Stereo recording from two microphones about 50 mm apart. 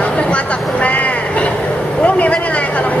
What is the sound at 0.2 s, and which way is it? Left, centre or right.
Vehicle, left.